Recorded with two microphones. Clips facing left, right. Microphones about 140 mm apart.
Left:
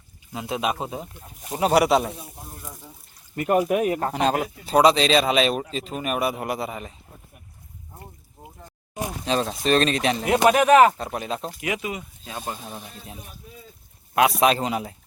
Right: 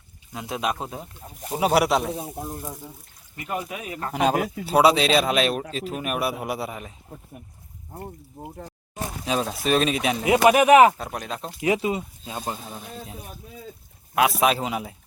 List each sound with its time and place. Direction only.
0.3 s speech: centre (ahead or behind)
3.3 s speech: 60° left (ahead or behind)
4.1 s speech: 10° right (ahead or behind)
8.4 s speech: 65° right (ahead or behind)
9.2 s speech: 5° right (ahead or behind)
10.9 s speech: centre (ahead or behind)
11.6 s speech: 30° right (ahead or behind)
12.6 s speech: centre (ahead or behind)
14.2 s speech: centre (ahead or behind)